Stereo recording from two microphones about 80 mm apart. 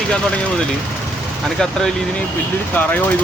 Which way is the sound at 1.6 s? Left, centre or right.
Centre.